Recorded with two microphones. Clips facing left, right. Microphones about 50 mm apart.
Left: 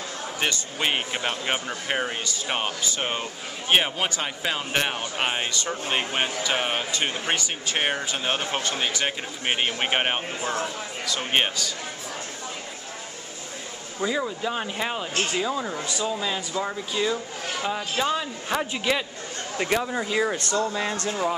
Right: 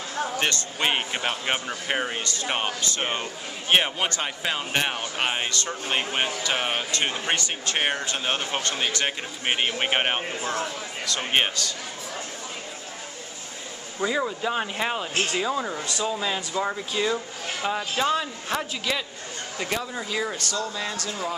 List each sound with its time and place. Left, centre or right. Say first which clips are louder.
0.4 s speech: left 2 dB; centre
13.9 s speech: right 1 dB; centre
18.7 s speech: left 3 dB; centre
20.3 s speech: left 4 dB; left